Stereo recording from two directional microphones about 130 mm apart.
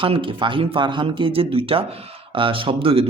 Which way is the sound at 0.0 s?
40° right (ahead or behind).